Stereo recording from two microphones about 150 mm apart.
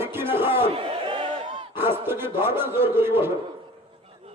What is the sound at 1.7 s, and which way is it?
A man's voice, 15° right (ahead or behind).